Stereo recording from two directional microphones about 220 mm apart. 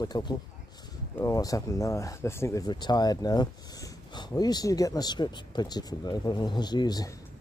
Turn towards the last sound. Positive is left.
turn(degrees=20)  # may be behind; listen again after turning